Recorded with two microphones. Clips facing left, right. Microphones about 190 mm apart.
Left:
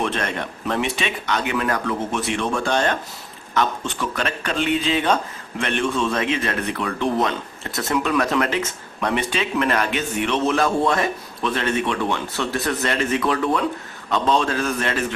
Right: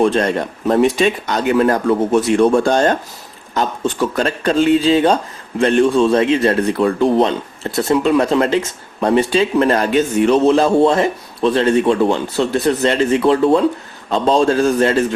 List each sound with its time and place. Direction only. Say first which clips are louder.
0.0 s speech: right 10 dB; 35° right (ahead or behind)